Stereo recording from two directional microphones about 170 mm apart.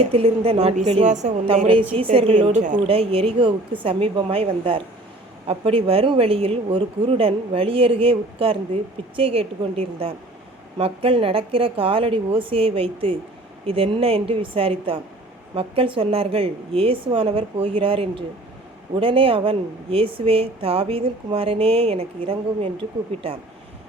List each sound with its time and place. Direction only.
0.0 s a woman's voice: 35° right (ahead or behind)
2.8 s speech: 35° right (ahead or behind)